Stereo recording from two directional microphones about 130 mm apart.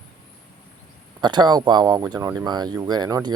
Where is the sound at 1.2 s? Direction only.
35° right (ahead or behind).